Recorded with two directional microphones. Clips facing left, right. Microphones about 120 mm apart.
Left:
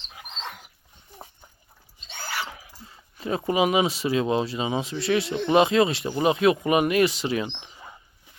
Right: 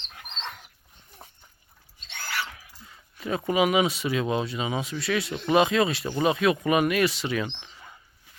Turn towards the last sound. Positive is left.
turn(degrees=20)  # may be behind; listen again after turning